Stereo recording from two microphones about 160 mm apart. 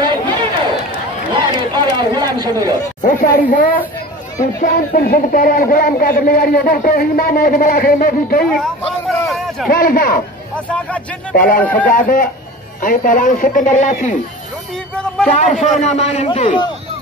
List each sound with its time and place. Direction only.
0.0 s run: 30° right (ahead or behind)
3.0 s a woman's voice: 50° left (ahead or behind)
8.5 s speech: 5° left (ahead or behind)
9.7 s speech: 65° left (ahead or behind)
10.5 s speech: 10° left (ahead or behind)
11.3 s speech: 60° left (ahead or behind)
15.2 s a man's voice: 50° left (ahead or behind)